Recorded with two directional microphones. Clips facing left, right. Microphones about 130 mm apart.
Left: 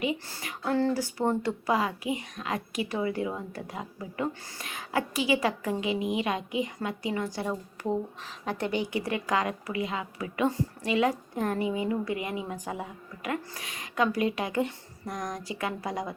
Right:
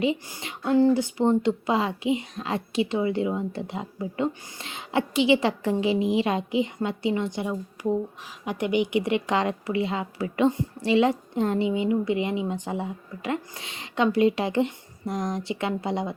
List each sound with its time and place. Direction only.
0.3 s speech: 20° right (ahead or behind)
7.8 s speech: 10° right (ahead or behind); by 16.1 s 25° right (ahead or behind)